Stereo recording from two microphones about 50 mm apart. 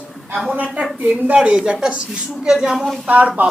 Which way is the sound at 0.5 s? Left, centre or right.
Right.